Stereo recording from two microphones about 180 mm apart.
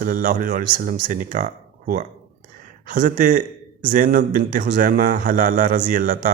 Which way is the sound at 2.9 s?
50° right (ahead or behind).